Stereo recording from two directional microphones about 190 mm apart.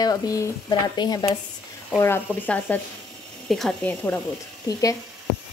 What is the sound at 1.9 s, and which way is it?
A woman's voice, 10° left (ahead or behind).